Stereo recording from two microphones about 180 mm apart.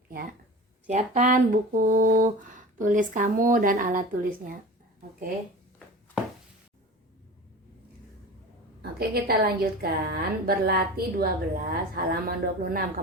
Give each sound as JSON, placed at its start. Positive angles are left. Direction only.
{"t": 0.9, "sound": "speech", "side_deg": -40}
{"t": 8.8, "sound": "a woman's voice", "side_deg": -60}